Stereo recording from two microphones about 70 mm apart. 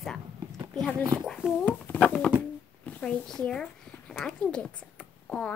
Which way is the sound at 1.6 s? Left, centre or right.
Left.